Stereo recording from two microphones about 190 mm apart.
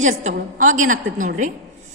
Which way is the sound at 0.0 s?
40° right (ahead or behind).